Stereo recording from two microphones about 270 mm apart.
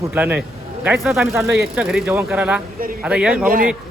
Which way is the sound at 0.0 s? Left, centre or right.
Centre.